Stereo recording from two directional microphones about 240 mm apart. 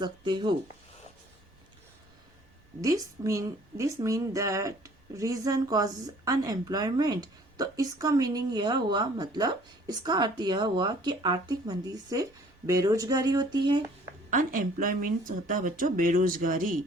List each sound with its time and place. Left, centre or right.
0.0 s speech: centre
2.8 s a woman's voice: centre
14.3 s speech: right